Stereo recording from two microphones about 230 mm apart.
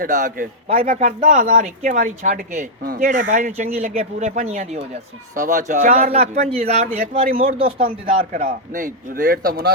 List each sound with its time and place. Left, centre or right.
0.0 s speech: right
7.3 s speech: right
8.2 s speech: right